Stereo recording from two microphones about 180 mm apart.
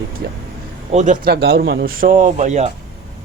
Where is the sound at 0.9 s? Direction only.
40° right (ahead or behind).